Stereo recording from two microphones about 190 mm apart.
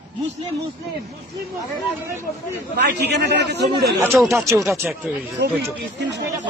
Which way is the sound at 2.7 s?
60° right (ahead or behind).